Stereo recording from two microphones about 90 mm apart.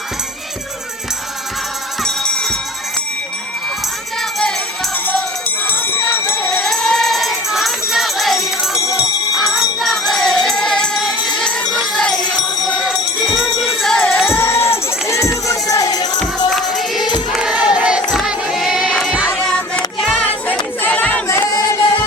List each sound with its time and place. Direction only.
2.0 s music: 5° left (ahead or behind)
5.6 s jingle bell: 20° left (ahead or behind)
6.5 s music: 5° left (ahead or behind)
8.8 s music: 35° left (ahead or behind)
9.3 s music: 5° right (ahead or behind)
12.8 s music: 5° right (ahead or behind)
14.3 s music: 30° left (ahead or behind); by 16.2 s 45° left (ahead or behind)
16.5 s music: centre (ahead or behind)
17.3 s choir: 5° right (ahead or behind)
19.4 s music: 10° left (ahead or behind)
20.0 s child singing: 5° left (ahead or behind)
20.8 s a sound: 20° left (ahead or behind)
21.2 s singing: 30° left (ahead or behind)
21.8 s music: 50° left (ahead or behind)